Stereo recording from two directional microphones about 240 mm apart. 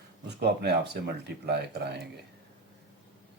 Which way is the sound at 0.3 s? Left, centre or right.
Right.